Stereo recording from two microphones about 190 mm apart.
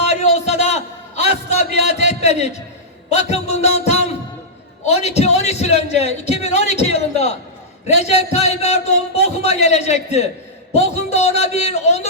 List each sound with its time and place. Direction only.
0.0 s a sound: 35° left (ahead or behind)
1.5 s music: 35° left (ahead or behind)
3.1 s a man's voice: 35° left (ahead or behind)